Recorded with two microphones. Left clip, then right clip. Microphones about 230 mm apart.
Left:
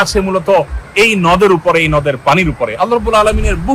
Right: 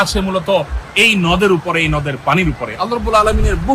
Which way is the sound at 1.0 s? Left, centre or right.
Left.